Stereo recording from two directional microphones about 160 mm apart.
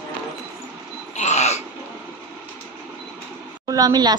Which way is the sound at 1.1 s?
45° left (ahead or behind).